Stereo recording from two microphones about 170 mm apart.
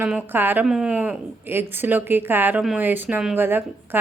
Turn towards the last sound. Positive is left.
turn(degrees=-10)  # may be behind; listen again after turning